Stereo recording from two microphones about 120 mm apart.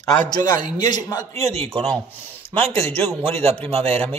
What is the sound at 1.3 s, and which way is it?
Speech, 60° right (ahead or behind).